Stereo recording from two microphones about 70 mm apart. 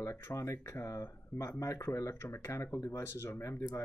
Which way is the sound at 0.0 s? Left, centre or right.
Left.